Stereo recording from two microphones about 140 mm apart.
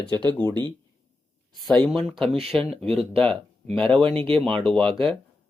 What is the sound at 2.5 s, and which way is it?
Speech, centre (ahead or behind).